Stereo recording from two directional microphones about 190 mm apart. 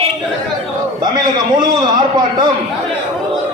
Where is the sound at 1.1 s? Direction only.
20° right (ahead or behind).